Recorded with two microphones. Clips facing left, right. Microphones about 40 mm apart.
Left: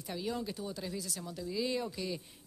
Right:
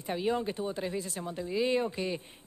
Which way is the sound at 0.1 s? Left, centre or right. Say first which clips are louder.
Right 7 dB; right.